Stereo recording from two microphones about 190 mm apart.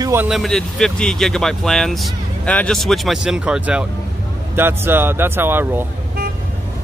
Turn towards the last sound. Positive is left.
turn(degrees=-10)  # may be behind; listen again after turning